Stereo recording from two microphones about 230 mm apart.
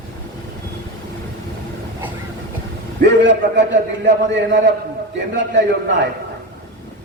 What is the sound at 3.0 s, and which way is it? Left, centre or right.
A man's voice, right.